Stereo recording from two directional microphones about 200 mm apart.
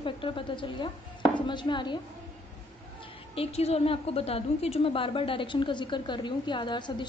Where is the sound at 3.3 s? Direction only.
30° left (ahead or behind).